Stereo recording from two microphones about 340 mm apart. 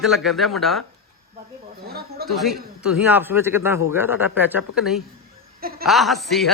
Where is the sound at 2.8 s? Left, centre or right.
Centre.